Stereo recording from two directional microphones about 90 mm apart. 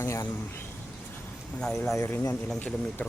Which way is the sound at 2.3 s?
20° left (ahead or behind).